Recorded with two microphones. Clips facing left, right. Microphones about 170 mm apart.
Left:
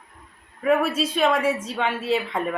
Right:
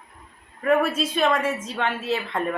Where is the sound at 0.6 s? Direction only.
5° left (ahead or behind).